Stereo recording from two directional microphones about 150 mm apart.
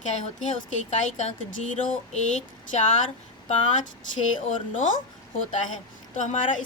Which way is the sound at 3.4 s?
55° left (ahead or behind).